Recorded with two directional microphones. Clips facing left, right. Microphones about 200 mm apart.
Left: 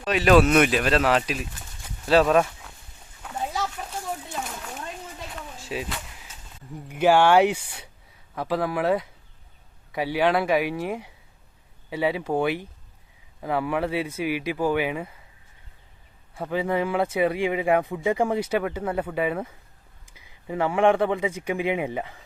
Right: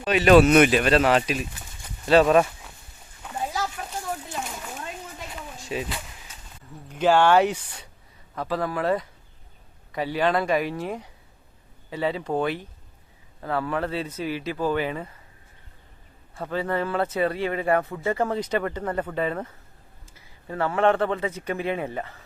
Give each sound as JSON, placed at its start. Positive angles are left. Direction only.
{"t": 0.0, "sound": "speech", "side_deg": 0}
{"t": 3.2, "sound": "a sound", "side_deg": 0}
{"t": 6.7, "sound": "speech", "side_deg": 10}
{"t": 16.3, "sound": "speech", "side_deg": 15}